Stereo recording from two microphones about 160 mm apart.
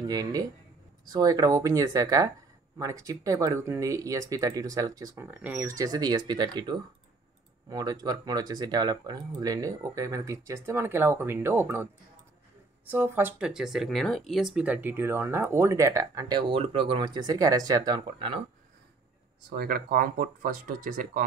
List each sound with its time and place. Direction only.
0.0 s speech: 25° right (ahead or behind)
12.9 s speech: 15° right (ahead or behind); by 18.4 s 30° right (ahead or behind)
19.5 s speech: 70° right (ahead or behind)